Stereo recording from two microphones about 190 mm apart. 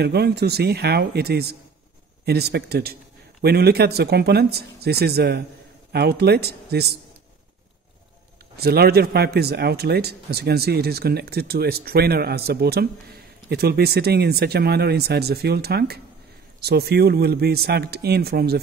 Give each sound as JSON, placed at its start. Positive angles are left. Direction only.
{"t": 0.0, "sound": "a man's voice", "side_deg": -55}
{"t": 8.5, "sound": "a man's voice", "side_deg": -55}